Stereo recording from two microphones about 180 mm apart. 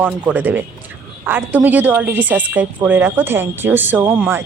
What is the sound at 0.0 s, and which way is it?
A woman's voice, 10° right (ahead or behind).